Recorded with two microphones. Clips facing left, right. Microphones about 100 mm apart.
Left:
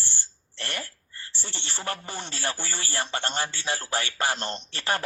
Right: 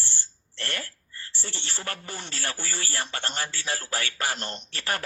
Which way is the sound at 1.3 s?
20° left (ahead or behind).